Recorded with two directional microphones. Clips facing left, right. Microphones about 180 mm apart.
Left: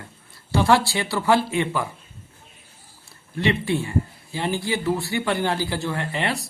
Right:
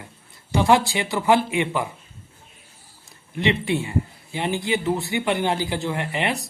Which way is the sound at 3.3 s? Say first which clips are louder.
Even; 20° right (ahead or behind).